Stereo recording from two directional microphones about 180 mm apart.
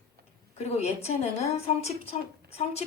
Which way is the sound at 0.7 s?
35° left (ahead or behind).